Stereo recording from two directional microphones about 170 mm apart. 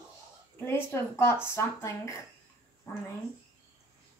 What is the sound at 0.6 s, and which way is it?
A woman's voice, 15° left (ahead or behind).